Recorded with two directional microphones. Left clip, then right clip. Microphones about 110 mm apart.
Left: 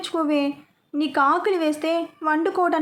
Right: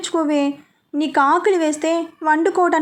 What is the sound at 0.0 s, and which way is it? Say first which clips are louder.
A woman's voice: right 4 dB; 25° right (ahead or behind).